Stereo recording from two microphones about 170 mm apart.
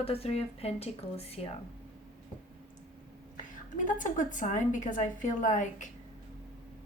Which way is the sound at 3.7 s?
50° left (ahead or behind).